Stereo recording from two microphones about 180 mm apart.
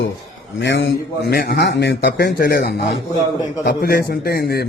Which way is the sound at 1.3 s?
60° left (ahead or behind).